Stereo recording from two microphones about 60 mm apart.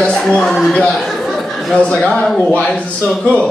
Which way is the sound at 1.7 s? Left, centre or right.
Centre.